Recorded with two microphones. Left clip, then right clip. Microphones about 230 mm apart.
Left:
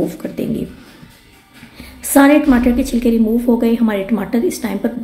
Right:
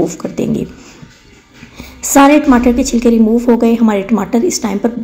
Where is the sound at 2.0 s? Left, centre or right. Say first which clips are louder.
Right 3 dB; centre.